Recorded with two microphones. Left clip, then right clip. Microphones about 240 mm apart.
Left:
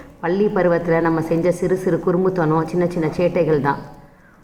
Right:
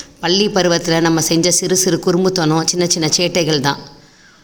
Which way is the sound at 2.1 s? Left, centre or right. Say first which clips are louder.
Right 2 dB; right.